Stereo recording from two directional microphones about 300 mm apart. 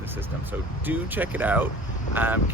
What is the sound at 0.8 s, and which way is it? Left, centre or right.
Speech, centre.